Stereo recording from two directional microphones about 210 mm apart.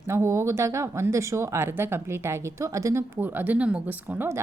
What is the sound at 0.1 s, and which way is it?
A woman's voice, 10° right (ahead or behind).